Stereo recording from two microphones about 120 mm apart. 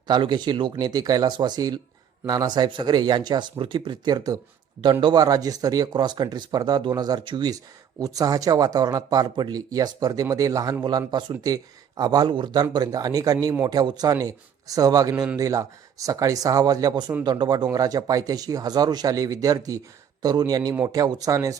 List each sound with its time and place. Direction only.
0.1 s speech: 40° right (ahead or behind)